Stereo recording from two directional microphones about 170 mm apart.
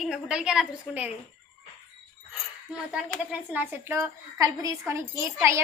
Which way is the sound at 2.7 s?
5° right (ahead or behind).